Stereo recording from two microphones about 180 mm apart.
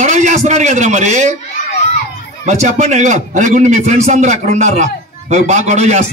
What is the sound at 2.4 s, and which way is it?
A man's voice, 40° right (ahead or behind).